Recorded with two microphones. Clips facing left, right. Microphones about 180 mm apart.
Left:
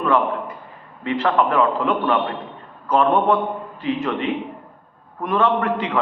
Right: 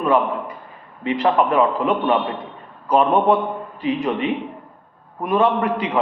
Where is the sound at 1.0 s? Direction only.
15° right (ahead or behind).